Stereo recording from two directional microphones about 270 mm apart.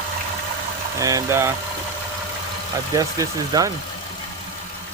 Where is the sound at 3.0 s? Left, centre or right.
Centre.